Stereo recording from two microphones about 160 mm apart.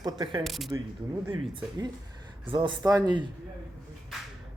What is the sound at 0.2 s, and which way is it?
Speech, 30° right (ahead or behind).